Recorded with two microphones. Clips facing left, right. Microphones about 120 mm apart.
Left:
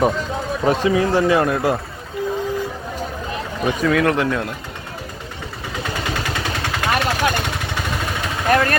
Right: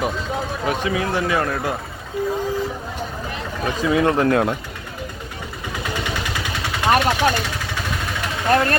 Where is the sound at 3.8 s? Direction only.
25° right (ahead or behind).